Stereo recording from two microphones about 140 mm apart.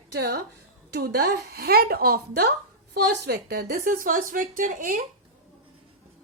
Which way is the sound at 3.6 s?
90° right.